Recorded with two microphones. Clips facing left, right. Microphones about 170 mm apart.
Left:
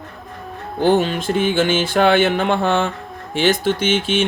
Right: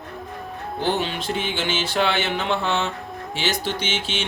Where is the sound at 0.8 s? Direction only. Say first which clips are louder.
Left 8 dB; 45° left (ahead or behind).